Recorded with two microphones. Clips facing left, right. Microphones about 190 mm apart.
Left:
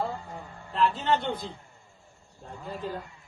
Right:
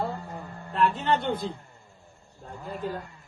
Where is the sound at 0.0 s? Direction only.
55° right (ahead or behind).